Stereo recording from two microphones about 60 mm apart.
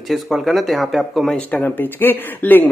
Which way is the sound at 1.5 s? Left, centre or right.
Left.